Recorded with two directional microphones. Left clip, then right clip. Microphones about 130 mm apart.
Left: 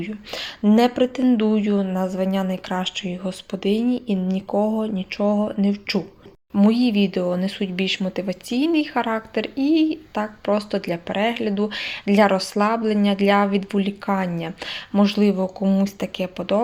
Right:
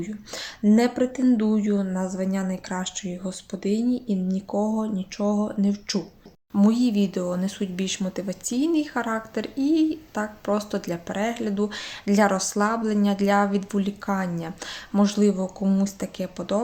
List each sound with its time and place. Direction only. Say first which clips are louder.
0.0 s speech: left 4 dB; 10° left (ahead or behind)